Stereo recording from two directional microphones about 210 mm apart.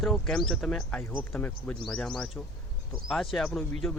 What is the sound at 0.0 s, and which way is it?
Speech, centre (ahead or behind).